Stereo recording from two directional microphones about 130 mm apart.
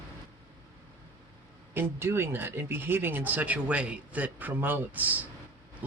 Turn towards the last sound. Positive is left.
turn(degrees=-15)  # may be behind; listen again after turning